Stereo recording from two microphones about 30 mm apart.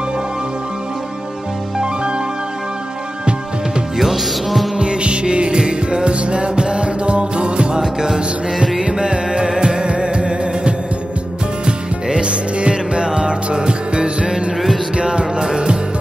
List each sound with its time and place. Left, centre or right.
1.8 s music: right
4.0 s music: centre
4.7 s music: right
7.8 s music: right